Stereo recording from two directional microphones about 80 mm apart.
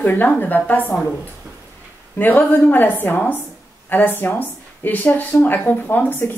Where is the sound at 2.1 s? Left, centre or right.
Left.